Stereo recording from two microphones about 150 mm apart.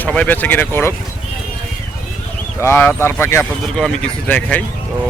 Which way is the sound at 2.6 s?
15° left (ahead or behind).